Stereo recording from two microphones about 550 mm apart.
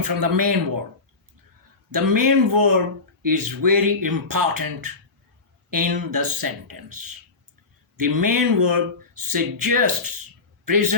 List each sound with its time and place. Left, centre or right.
0.0 s speech: right
1.9 s speech: right